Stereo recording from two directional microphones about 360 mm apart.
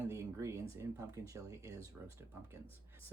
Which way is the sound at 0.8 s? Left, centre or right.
Centre.